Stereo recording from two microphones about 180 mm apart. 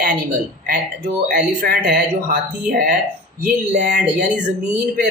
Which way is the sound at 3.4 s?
45° right (ahead or behind).